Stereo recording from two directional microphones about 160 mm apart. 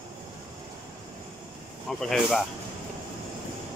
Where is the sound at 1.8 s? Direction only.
Centre (ahead or behind).